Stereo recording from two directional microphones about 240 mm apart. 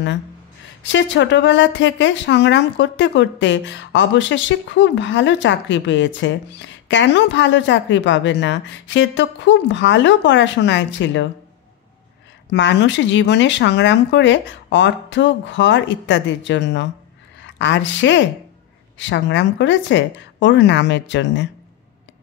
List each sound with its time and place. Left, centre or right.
0.8 s speech: left
12.4 s a woman's voice: left